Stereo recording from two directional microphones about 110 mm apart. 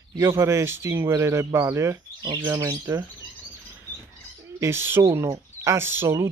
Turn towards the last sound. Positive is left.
turn(degrees=-20)  # may be behind; listen again after turning